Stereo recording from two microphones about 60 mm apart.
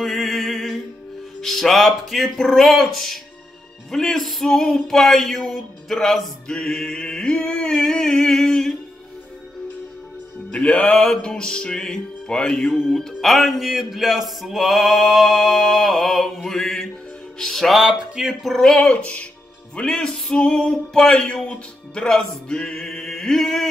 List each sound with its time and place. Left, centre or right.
0.0 s music: centre
1.4 s speech: centre
3.9 s male singing: centre
10.5 s music: centre
12.7 s speech: centre
18.5 s music: centre